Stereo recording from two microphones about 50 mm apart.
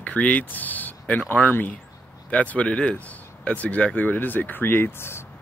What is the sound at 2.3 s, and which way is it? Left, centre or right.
Speech, left.